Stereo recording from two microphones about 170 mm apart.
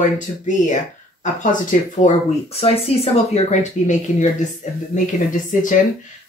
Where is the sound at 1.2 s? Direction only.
50° left (ahead or behind).